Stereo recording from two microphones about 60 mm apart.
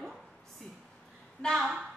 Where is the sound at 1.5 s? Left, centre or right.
Centre.